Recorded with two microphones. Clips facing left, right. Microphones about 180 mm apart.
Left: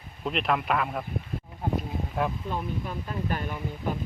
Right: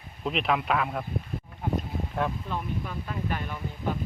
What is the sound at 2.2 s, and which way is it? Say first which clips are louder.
Speech: left 1 dB; 5° left (ahead or behind).